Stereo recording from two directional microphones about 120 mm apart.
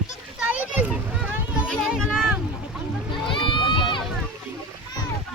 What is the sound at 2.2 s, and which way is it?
Boat, 5° right (ahead or behind).